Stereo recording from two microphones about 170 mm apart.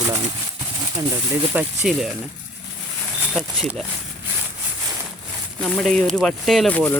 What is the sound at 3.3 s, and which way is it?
Speech, centre (ahead or behind).